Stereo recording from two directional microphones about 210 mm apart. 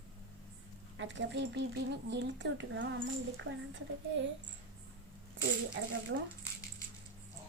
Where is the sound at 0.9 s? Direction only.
60° right (ahead or behind).